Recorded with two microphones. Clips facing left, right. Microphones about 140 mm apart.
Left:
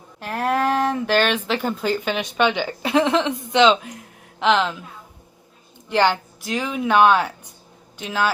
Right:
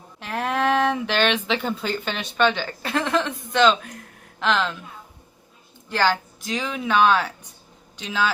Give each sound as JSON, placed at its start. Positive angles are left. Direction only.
{"t": 0.2, "sound": "speech", "side_deg": 10}
{"t": 5.9, "sound": "speech", "side_deg": 15}